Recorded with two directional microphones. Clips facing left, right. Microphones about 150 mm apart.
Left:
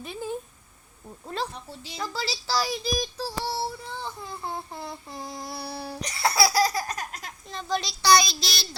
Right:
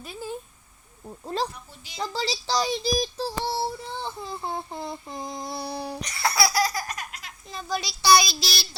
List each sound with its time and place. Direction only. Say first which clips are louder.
0.0 s speech: left 2 dB; centre (ahead or behind)
1.2 s speech: right 3 dB; 35° right (ahead or behind)
1.5 s speech: left 6 dB; 30° left (ahead or behind)
2.0 s speech: right 3 dB; 25° right (ahead or behind)
6.0 s laughter: left 2 dB; 30° left (ahead or behind)
7.4 s speech: left 1 dB; 5° right (ahead or behind)